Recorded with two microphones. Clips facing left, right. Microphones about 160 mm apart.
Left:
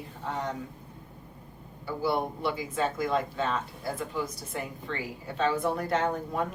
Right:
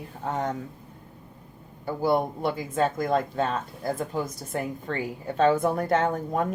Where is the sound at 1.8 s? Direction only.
45° right (ahead or behind).